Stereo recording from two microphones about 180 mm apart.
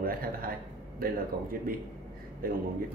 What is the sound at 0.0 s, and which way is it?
A man's voice, 55° right (ahead or behind).